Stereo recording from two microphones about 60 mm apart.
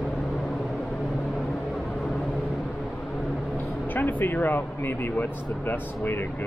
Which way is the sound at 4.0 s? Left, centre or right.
Left.